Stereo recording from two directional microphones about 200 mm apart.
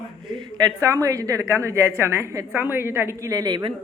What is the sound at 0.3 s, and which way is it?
A woman's voice, 20° right (ahead or behind).